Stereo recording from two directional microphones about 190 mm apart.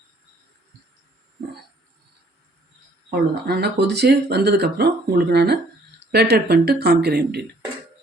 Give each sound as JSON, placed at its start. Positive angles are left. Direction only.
{"t": 3.4, "sound": "speech", "side_deg": -55}